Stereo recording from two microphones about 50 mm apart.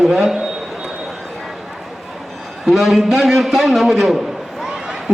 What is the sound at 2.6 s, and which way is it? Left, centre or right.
A man's voice, centre.